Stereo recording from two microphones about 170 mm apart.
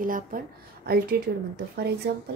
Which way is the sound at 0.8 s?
65° right (ahead or behind).